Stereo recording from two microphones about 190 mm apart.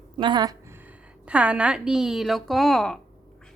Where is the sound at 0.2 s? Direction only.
25° right (ahead or behind).